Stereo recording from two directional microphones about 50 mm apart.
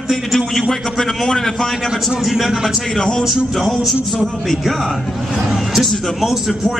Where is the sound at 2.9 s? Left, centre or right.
Centre.